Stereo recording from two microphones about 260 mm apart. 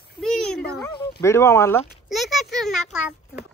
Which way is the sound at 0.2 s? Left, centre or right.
Centre.